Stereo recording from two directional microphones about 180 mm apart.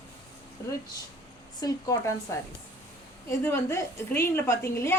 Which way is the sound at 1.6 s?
20° left (ahead or behind).